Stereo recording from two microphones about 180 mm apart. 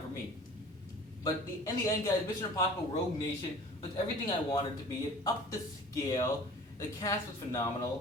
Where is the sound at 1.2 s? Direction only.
20° left (ahead or behind).